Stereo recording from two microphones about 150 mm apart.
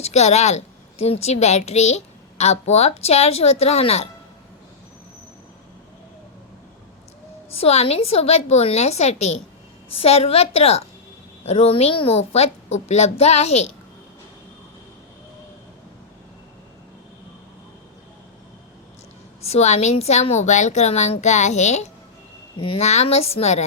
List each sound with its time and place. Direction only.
0.0 s a woman's voice: 45° left (ahead or behind)
7.5 s a woman's voice: 45° left (ahead or behind)
19.5 s a woman's voice: 50° left (ahead or behind)
22.5 s speech: 35° left (ahead or behind)
22.8 s a woman's voice: 50° left (ahead or behind)